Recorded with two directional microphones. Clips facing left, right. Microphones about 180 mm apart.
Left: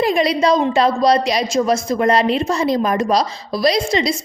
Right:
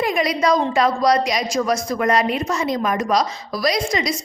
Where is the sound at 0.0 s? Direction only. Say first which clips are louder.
Left 4 dB; 30° left (ahead or behind).